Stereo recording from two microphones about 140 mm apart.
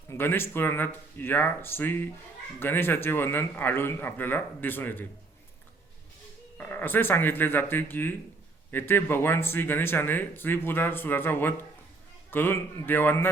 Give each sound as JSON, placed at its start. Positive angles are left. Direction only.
{"t": 0.1, "sound": "speech", "side_deg": 15}
{"t": 6.6, "sound": "speech", "side_deg": 15}